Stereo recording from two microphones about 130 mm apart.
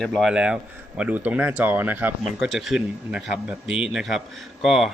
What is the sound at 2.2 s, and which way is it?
Speech, centre (ahead or behind).